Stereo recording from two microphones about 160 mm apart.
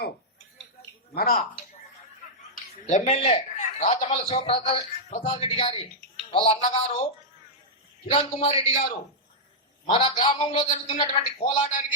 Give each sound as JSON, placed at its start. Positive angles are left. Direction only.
{"t": 1.1, "sound": "a woman's voice", "side_deg": 70}
{"t": 2.8, "sound": "a man's voice", "side_deg": 45}
{"t": 8.0, "sound": "a man's voice", "side_deg": 40}
{"t": 9.9, "sound": "a man's voice", "side_deg": 30}
{"t": 11.3, "sound": "speech", "side_deg": 45}